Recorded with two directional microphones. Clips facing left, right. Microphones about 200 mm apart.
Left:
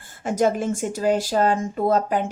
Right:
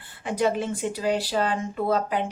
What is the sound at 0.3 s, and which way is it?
Speech, 45° left (ahead or behind).